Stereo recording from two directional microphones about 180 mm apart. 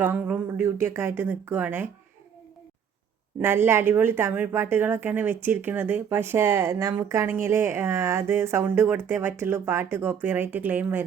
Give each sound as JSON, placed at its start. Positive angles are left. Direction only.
{"t": 0.0, "sound": "speech", "side_deg": -10}
{"t": 3.4, "sound": "speech", "side_deg": -15}